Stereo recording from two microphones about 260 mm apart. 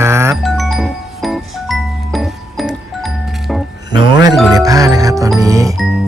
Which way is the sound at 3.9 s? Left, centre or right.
Centre.